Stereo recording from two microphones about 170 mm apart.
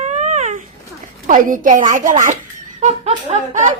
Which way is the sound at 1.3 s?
50° right (ahead or behind).